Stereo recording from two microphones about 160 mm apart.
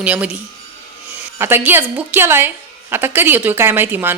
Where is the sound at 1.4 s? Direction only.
15° right (ahead or behind).